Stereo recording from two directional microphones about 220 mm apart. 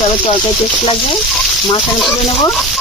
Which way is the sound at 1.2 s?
Centre (ahead or behind).